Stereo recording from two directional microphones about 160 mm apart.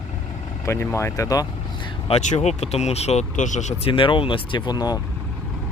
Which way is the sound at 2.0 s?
45° left (ahead or behind).